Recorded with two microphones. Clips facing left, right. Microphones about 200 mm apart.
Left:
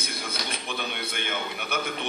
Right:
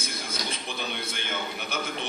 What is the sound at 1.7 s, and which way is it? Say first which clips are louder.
Speech: left 3 dB; 60° left (ahead or behind).